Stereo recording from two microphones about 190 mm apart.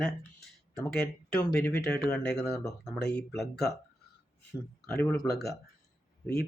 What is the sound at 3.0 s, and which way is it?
Speech, 60° left (ahead or behind).